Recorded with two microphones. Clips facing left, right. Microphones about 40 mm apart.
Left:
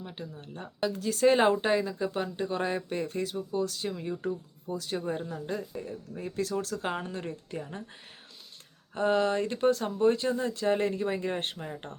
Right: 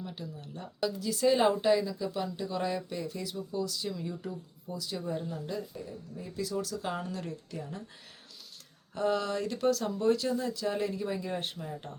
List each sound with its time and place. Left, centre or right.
0.0 s speech: left
0.9 s speech: left
9.0 s speech: left